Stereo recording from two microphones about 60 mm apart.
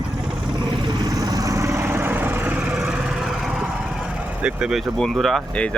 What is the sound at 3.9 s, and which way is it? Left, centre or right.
Vehicle, centre.